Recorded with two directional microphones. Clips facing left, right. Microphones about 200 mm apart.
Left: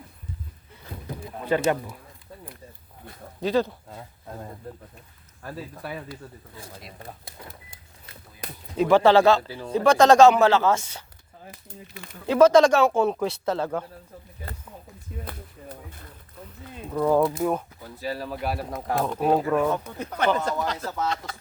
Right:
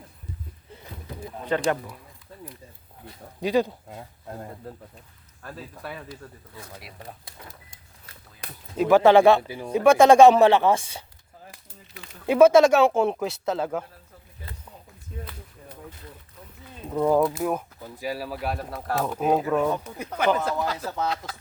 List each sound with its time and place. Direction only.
1.5 s speech: 5° left (ahead or behind)
3.4 s speech: 15° right (ahead or behind)
5.4 s speech: 5° left (ahead or behind)
8.8 s speech: 10° right (ahead or behind)
12.3 s speech: 10° right (ahead or behind)
16.9 s speech: 15° right (ahead or behind); by 18.7 s centre (ahead or behind)
18.7 s speech: 15° left (ahead or behind)
18.9 s speech: 5° right (ahead or behind)